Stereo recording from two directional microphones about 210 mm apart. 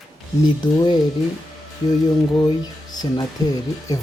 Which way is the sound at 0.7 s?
20° left (ahead or behind).